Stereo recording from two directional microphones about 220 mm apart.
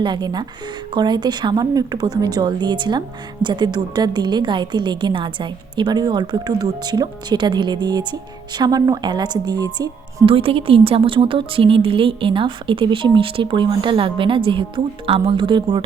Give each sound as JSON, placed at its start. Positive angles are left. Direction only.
{"t": 0.0, "sound": "a woman's voice", "side_deg": -20}